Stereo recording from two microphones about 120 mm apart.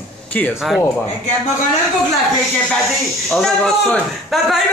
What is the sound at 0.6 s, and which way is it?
Speech, centre (ahead or behind).